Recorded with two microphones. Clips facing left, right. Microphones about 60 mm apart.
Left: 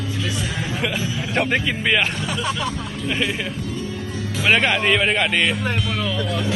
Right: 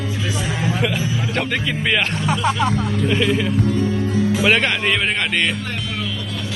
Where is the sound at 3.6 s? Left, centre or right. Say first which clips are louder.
Right 9 dB; right.